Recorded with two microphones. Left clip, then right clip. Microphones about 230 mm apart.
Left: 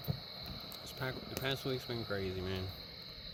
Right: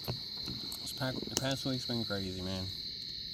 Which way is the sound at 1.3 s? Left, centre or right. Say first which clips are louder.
Right 1 dB; left.